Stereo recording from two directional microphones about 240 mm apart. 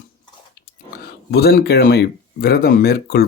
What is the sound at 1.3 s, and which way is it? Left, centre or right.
Speech, left.